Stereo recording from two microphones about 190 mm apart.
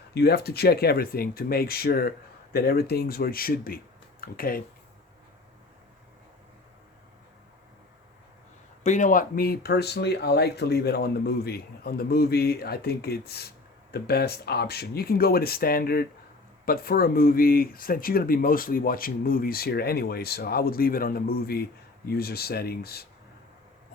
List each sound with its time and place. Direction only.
0.1 s speech: 55° left (ahead or behind)
8.8 s speech: 40° left (ahead or behind); by 23.0 s 55° left (ahead or behind)